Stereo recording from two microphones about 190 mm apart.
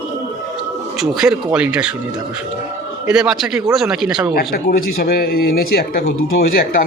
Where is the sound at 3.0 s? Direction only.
5° right (ahead or behind).